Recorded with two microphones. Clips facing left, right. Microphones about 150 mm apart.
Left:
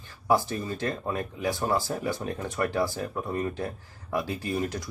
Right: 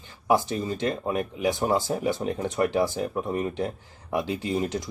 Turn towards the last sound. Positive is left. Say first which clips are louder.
# right 3 dB
turn(degrees=-20)  # may be behind; listen again after turning